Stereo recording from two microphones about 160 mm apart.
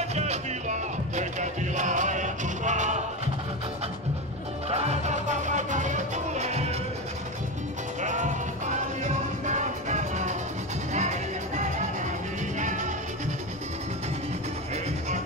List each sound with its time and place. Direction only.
0.1 s music: 45° right (ahead or behind)
4.6 s music: 40° right (ahead or behind)
8.0 s music: 50° right (ahead or behind)